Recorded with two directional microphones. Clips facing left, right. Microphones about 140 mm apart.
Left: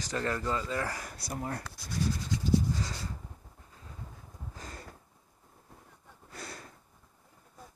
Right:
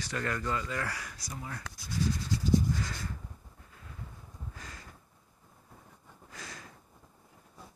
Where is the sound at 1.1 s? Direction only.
55° left (ahead or behind).